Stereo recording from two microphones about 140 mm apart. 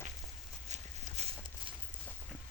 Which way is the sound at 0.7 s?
50° right (ahead or behind).